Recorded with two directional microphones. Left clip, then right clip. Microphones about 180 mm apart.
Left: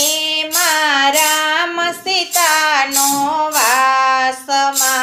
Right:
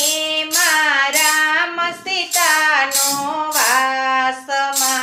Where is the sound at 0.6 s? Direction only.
35° left (ahead or behind).